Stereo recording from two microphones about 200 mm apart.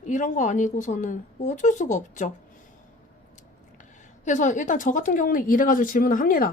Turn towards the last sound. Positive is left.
turn(degrees=45)  # may be behind; listen again after turning